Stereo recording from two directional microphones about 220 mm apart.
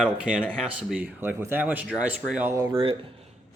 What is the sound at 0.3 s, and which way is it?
Speech, 5° right (ahead or behind).